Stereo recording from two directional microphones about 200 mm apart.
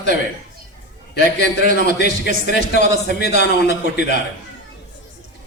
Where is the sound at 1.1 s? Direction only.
55° left (ahead or behind).